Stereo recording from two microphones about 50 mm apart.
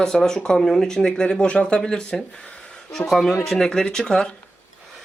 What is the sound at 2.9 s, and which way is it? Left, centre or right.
A man's voice, centre.